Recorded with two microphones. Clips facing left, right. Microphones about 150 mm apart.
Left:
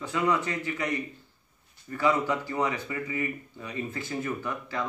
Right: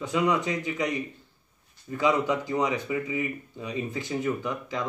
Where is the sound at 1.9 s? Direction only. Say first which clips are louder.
Right 1 dB; 15° right (ahead or behind).